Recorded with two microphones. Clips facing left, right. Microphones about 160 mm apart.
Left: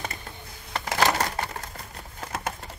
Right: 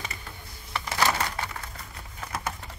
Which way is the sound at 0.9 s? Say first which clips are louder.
Left 3 dB; 40° left (ahead or behind).